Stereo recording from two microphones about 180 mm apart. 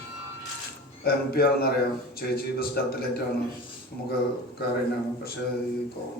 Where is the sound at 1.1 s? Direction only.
60° left (ahead or behind).